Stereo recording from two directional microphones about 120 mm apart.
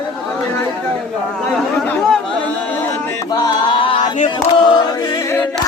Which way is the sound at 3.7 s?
50° left (ahead or behind).